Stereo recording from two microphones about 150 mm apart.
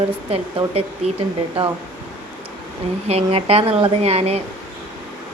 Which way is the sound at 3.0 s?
40° right (ahead or behind).